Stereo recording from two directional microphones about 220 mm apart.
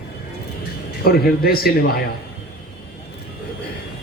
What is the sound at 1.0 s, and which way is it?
A man's voice, 45° left (ahead or behind).